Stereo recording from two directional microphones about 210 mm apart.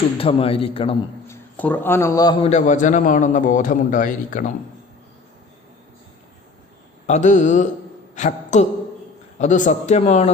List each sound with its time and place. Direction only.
0.2 s a man's voice: 25° left (ahead or behind)
1.3 s a man's voice: 10° left (ahead or behind)
2.5 s a man's voice: 35° left (ahead or behind)
7.1 s a man's voice: 35° left (ahead or behind)